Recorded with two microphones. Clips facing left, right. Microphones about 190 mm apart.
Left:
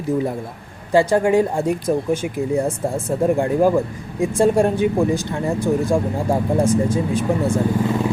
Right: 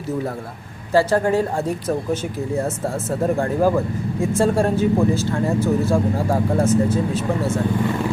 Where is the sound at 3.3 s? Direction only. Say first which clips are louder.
Left 1 dB; 15° left (ahead or behind).